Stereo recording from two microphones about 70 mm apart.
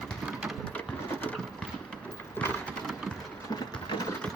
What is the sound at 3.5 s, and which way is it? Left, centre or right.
Sewing machine, left.